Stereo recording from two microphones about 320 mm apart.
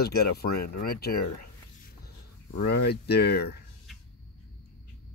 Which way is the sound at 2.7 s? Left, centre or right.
Left.